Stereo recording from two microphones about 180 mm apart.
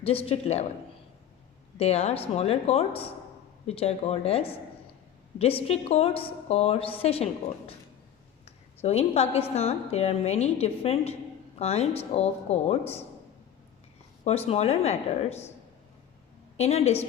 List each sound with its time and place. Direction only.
0.0 s a woman's voice: 35° left (ahead or behind)
1.8 s a woman's voice: 35° left (ahead or behind)
8.4 s a sound: 35° left (ahead or behind)
9.6 s a woman's voice: 35° left (ahead or behind)
14.3 s a woman's voice: 35° left (ahead or behind)
16.6 s a woman's voice: 35° left (ahead or behind)